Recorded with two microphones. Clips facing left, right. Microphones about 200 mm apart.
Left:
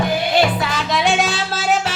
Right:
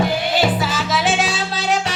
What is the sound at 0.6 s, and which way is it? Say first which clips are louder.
Music: even; 5° right (ahead or behind).